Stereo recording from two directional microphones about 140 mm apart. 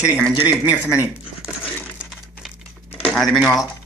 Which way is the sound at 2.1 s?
Centre (ahead or behind).